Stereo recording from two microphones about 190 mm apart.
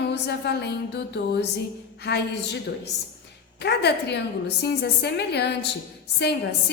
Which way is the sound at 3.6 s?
60° left (ahead or behind).